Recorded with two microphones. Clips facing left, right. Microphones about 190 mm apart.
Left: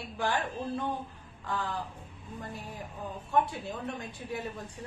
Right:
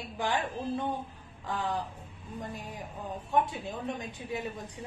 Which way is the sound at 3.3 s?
20° right (ahead or behind).